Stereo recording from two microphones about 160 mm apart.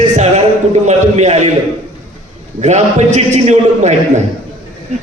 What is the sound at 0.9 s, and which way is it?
Speech, 45° right (ahead or behind).